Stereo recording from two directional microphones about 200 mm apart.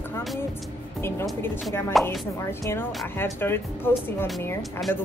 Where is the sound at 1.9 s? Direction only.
Centre (ahead or behind).